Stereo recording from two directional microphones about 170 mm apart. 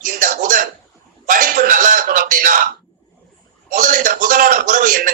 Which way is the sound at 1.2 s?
55° right (ahead or behind).